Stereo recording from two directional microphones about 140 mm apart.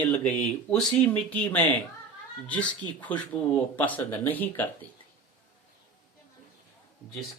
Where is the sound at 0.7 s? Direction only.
10° left (ahead or behind).